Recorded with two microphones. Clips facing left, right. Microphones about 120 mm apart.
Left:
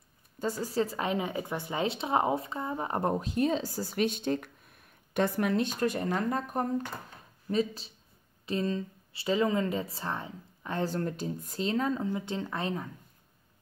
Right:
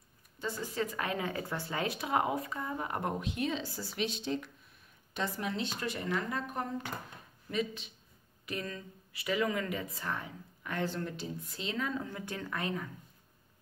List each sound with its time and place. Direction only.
0.4 s speech: 40° left (ahead or behind)
12.1 s speech: 20° left (ahead or behind)